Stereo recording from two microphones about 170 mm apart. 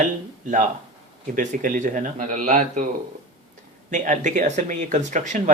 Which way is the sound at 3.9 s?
45° right (ahead or behind).